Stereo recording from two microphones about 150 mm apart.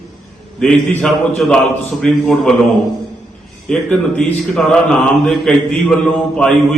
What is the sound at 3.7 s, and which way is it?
Mantra, 5° left (ahead or behind).